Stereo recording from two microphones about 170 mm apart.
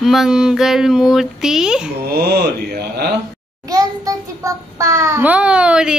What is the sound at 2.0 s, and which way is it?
Speech, 65° right (ahead or behind).